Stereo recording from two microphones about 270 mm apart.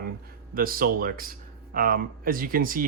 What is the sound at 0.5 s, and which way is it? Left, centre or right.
Speech, right.